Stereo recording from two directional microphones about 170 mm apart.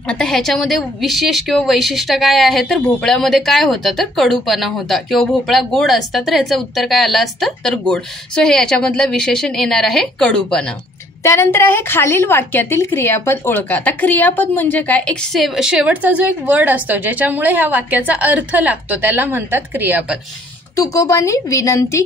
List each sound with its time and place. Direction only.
0.1 s a woman's voice: 5° left (ahead or behind)
20.7 s speech: 20° left (ahead or behind)